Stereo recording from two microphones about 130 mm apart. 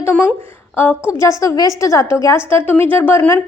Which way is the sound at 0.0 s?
15° left (ahead or behind).